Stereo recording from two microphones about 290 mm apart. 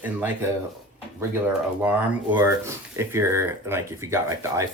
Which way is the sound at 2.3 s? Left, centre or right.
Centre.